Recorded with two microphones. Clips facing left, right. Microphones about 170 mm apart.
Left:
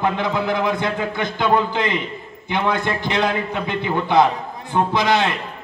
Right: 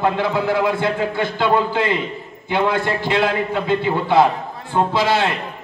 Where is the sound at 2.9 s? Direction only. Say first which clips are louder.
Right 2 dB; 20° left (ahead or behind).